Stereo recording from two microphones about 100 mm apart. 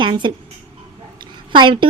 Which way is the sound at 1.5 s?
55° right (ahead or behind).